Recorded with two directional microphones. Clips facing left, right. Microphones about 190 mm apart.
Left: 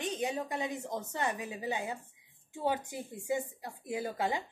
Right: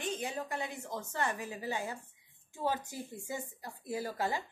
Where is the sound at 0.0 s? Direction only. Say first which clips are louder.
Left 3 dB; 20° left (ahead or behind).